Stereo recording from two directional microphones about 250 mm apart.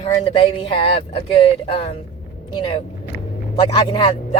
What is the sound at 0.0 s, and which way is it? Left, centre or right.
Speech, left.